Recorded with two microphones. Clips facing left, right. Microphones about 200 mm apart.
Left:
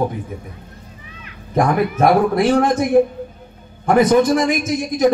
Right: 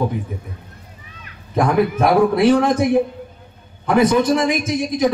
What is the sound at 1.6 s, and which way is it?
A man's voice, 45° left (ahead or behind).